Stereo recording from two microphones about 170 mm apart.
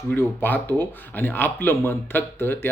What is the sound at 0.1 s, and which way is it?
Speech, 10° left (ahead or behind).